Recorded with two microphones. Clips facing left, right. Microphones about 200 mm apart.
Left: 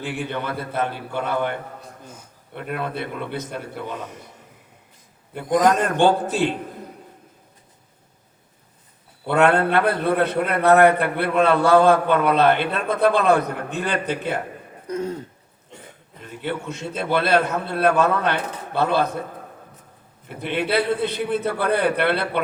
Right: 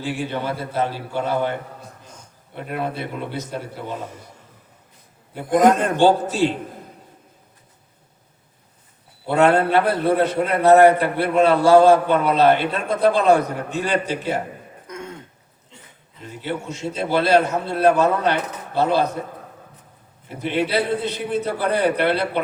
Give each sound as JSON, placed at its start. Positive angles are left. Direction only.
{"t": 0.0, "sound": "a man's voice", "side_deg": 60}
{"t": 2.9, "sound": "a man's voice", "side_deg": 55}
{"t": 5.5, "sound": "a man's voice", "side_deg": -55}
{"t": 6.0, "sound": "a man's voice", "side_deg": 60}
{"t": 9.2, "sound": "a man's voice", "side_deg": 60}
{"t": 14.8, "sound": "throat clearing", "side_deg": 35}
{"t": 16.2, "sound": "a man's voice", "side_deg": 55}
{"t": 20.2, "sound": "a man's voice", "side_deg": 60}